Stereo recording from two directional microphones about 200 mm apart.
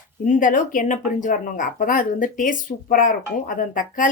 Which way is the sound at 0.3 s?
40° left (ahead or behind).